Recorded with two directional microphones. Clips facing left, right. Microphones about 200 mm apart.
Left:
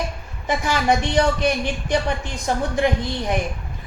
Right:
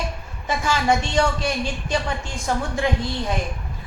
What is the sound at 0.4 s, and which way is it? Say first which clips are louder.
A woman's voice: left 1 dB; 15° left (ahead or behind).